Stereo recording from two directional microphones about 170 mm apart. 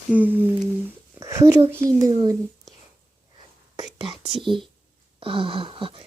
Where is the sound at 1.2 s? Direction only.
20° right (ahead or behind).